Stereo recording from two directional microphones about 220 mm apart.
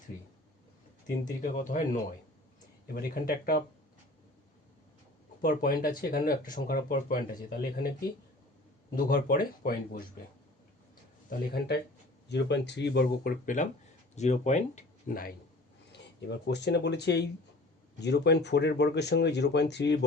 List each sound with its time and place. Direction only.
1.4 s speech: 40° left (ahead or behind)
5.4 s speech: 40° left (ahead or behind)
9.0 s speech: 40° left (ahead or behind)
11.3 s speech: 45° left (ahead or behind)